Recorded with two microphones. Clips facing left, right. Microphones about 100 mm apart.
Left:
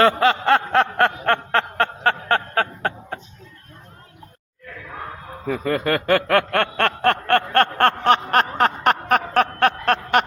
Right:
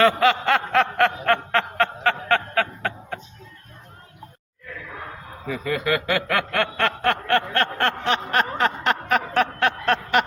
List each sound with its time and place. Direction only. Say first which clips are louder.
0.0 s snicker: left 1 dB; 35° left (ahead or behind)
5.5 s snicker: left 3 dB; 45° left (ahead or behind)